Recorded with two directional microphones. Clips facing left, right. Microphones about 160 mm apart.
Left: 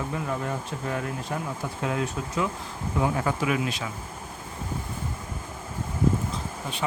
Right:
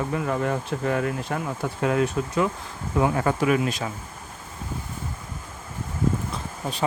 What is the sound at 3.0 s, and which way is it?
Speech, 50° right (ahead or behind).